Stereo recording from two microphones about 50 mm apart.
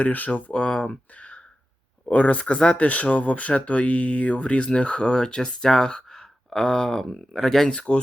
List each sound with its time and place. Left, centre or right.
0.0 s speech: left
0.5 s speech: left